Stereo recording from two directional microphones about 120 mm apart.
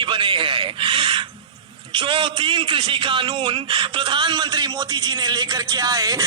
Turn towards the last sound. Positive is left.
turn(degrees=-30)  # may be behind; listen again after turning